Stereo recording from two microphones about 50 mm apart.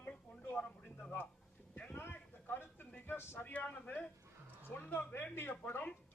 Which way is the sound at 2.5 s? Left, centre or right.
Left.